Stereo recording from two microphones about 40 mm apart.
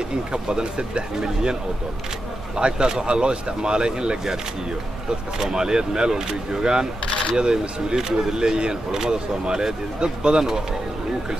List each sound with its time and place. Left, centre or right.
0.3 s speech: right
5.4 s speech: centre